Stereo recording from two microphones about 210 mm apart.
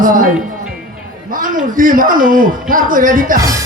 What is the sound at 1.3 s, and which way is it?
Speech, 40° right (ahead or behind).